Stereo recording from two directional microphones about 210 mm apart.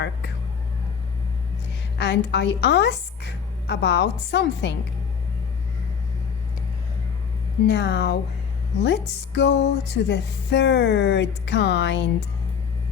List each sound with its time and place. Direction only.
2.0 s speech: 55° left (ahead or behind)
7.7 s speech: 55° left (ahead or behind)